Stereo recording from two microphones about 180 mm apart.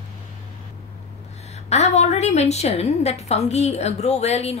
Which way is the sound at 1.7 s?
40° left (ahead or behind).